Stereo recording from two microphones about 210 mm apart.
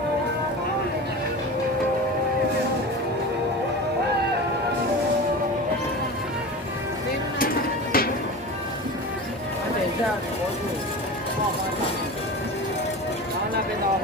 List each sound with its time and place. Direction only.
7.3 s music: 45° left (ahead or behind)